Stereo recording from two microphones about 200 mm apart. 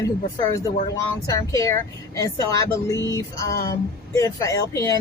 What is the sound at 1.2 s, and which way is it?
A woman's voice, 15° left (ahead or behind).